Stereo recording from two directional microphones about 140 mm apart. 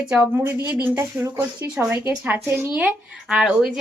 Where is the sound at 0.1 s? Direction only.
15° right (ahead or behind).